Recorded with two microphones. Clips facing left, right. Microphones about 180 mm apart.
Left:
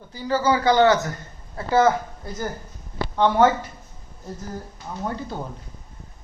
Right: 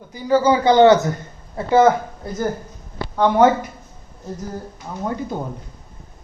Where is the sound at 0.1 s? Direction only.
15° right (ahead or behind).